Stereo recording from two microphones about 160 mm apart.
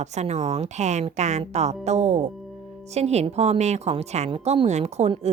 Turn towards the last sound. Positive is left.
turn(degrees=-40)  # may be behind; listen again after turning